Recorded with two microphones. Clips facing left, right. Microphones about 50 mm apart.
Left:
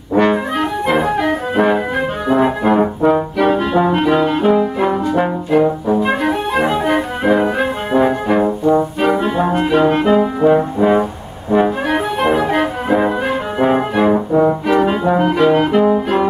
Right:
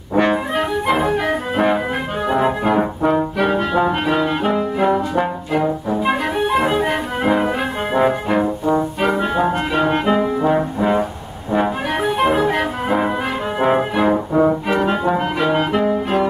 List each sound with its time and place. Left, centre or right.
0.1 s brass instrument: centre
5.9 s music: centre
8.7 s brass instrument: centre
11.5 s music: centre
13.6 s brass instrument: centre